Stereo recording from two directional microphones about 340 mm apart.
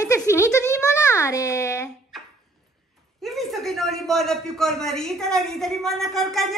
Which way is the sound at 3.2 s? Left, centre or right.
Centre.